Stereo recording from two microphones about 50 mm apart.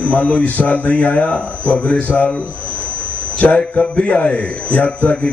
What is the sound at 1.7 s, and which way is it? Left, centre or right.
Speech, left.